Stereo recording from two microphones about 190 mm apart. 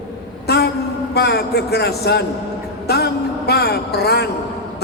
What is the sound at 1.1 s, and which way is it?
A man's voice, 60° left (ahead or behind).